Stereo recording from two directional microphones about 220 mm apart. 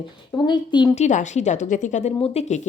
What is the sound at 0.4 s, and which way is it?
Speech, 20° left (ahead or behind).